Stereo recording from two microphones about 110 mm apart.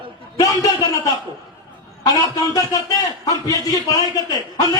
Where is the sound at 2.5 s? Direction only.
35° left (ahead or behind).